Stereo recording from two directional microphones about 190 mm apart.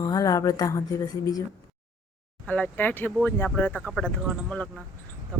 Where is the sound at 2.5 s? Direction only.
5° left (ahead or behind).